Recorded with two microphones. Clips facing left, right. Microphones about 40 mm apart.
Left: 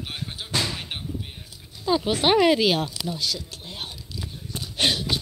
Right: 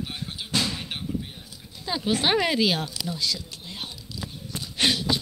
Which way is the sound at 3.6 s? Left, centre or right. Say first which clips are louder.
Left 1 dB; left.